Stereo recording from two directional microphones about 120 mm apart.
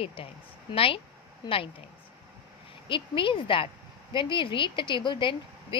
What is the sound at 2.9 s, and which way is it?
A woman's voice, 45° left (ahead or behind).